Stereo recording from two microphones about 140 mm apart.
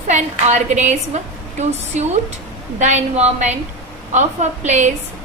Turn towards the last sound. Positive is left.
turn(degrees=-55)  # may be behind; listen again after turning